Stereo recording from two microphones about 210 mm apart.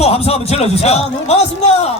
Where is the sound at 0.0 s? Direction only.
30° left (ahead or behind).